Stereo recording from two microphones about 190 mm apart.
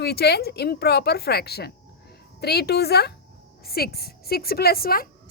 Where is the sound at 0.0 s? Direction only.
60° left (ahead or behind).